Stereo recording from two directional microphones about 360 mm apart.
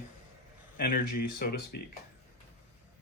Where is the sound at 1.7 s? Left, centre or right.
Left.